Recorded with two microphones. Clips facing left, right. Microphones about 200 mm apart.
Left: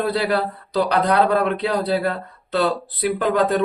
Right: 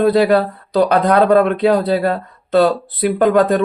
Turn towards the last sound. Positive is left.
turn(degrees=-50)  # may be behind; listen again after turning